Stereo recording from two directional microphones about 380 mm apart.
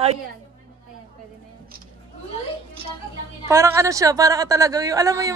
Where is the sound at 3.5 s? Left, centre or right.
Centre.